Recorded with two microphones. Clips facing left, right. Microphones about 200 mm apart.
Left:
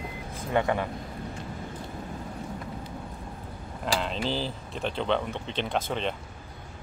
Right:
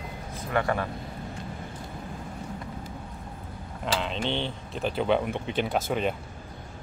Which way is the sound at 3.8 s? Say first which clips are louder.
Even; centre (ahead or behind).